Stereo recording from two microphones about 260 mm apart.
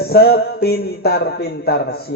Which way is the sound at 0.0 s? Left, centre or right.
Left.